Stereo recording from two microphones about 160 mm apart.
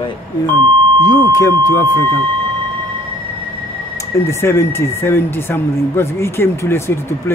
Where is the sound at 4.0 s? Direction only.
15° left (ahead or behind).